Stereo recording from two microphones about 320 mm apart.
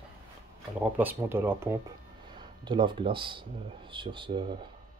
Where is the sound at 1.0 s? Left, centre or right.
Centre.